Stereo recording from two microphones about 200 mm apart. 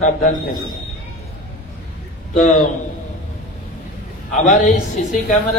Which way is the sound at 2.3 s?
35° left (ahead or behind).